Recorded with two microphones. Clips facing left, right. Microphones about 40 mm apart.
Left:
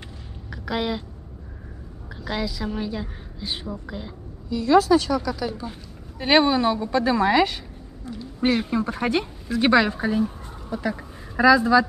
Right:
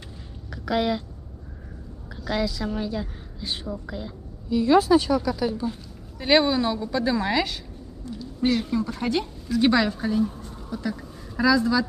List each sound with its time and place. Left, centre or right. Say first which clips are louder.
0.5 s a sound: right 2 dB; centre
2.2 s a woman's voice: right 1 dB; centre
4.5 s a woman's voice: left 1 dB; centre
6.1 s a woman's voice: left 2 dB; left